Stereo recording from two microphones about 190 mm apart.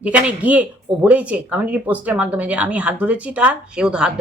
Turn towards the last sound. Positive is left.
turn(degrees=-5)  # may be behind; listen again after turning